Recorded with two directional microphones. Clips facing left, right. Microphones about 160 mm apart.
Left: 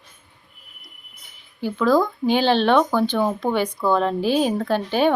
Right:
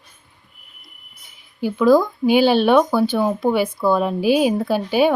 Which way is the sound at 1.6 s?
10° right (ahead or behind).